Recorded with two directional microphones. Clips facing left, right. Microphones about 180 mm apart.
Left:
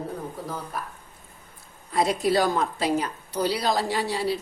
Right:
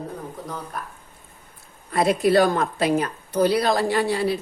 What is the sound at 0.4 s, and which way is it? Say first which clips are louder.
Speech: even; 5° left (ahead or behind).